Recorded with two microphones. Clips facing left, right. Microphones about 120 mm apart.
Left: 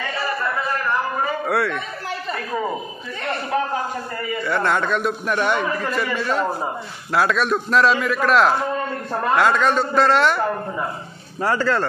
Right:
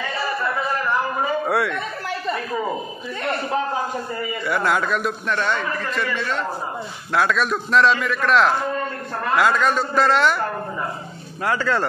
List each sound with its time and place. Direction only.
1.5 s speech: 15° right (ahead or behind)
4.5 s a man's voice: 5° right (ahead or behind)
5.3 s a man's voice: 15° left (ahead or behind)
11.4 s a man's voice: 5° left (ahead or behind)